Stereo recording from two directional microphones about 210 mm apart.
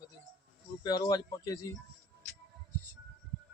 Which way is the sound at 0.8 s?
20° left (ahead or behind).